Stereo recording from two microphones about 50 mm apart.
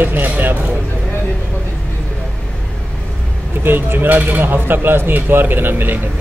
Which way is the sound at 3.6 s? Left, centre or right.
Right.